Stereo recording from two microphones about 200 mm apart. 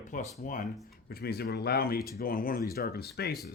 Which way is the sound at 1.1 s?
50° left (ahead or behind).